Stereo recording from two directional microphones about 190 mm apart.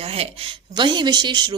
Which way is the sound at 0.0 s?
30° right (ahead or behind).